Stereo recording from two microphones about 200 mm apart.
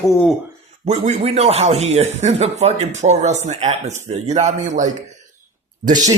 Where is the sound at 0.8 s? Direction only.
35° right (ahead or behind).